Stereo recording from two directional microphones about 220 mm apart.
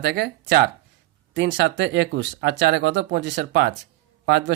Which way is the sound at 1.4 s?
55° right (ahead or behind).